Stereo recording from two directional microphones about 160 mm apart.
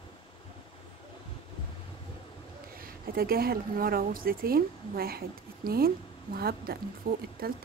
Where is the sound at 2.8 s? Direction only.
70° right (ahead or behind).